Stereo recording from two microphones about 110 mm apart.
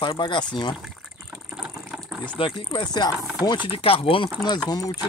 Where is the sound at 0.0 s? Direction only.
45° left (ahead or behind).